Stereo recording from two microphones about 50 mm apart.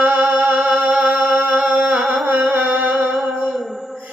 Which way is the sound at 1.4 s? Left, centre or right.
Right.